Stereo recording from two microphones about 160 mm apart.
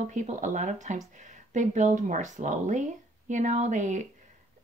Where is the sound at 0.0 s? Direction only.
50° right (ahead or behind).